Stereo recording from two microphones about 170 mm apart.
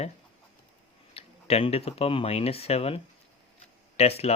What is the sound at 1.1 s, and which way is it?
Speech, 35° left (ahead or behind).